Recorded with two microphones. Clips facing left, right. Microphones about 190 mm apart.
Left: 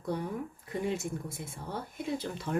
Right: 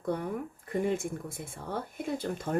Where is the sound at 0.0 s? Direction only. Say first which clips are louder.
Right 2 dB; 55° right (ahead or behind).